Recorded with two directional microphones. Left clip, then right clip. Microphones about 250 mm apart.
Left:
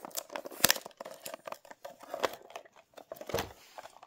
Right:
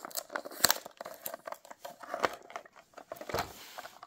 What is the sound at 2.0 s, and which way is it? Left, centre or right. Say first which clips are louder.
Crumpling: right 1 dB; centre.